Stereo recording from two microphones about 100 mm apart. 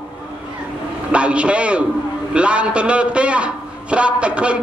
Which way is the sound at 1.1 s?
10° right (ahead or behind).